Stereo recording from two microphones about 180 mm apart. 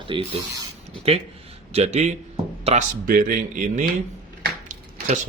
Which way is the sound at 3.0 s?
50° right (ahead or behind).